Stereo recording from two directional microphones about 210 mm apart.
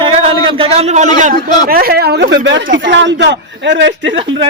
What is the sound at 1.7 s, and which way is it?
Speech, 45° right (ahead or behind).